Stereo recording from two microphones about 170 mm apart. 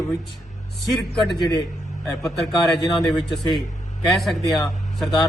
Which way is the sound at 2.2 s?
Centre (ahead or behind).